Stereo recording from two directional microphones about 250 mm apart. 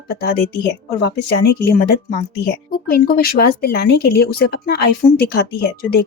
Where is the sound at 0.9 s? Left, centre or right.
Left.